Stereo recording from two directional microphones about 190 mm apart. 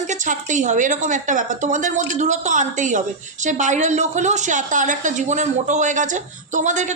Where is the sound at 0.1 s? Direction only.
40° right (ahead or behind).